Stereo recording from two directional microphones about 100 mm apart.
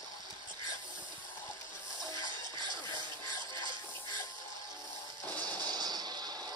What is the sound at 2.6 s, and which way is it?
Music, 50° right (ahead or behind).